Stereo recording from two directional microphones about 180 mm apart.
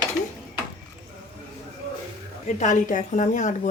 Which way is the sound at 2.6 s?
45° left (ahead or behind).